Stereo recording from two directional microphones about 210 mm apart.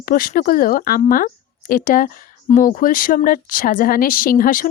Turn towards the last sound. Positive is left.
turn(degrees=40)  # may be behind; listen again after turning